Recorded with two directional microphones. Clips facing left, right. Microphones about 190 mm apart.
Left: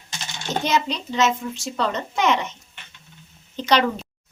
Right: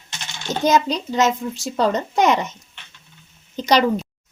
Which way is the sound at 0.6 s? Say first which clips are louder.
Right 7 dB; 40° right (ahead or behind).